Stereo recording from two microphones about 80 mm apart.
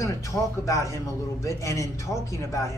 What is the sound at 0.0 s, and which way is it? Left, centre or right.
Speech, left.